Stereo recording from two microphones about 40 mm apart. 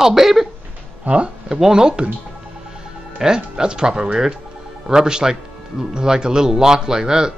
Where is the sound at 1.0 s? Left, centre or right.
Right.